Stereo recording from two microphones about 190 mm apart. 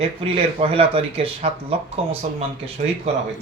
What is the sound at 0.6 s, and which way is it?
Speech, 30° right (ahead or behind).